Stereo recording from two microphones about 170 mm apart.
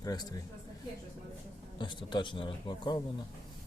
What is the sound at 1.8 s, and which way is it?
A man's voice, 25° left (ahead or behind).